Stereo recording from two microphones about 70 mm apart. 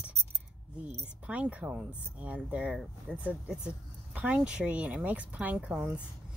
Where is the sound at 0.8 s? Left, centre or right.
Centre.